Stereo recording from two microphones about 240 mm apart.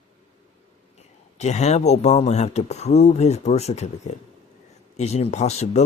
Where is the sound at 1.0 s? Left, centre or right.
Left.